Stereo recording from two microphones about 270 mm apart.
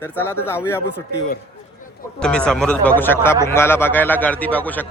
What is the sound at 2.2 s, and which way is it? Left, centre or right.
Speech, centre.